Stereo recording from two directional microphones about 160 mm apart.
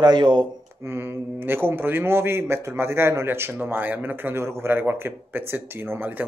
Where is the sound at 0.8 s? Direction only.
15° right (ahead or behind).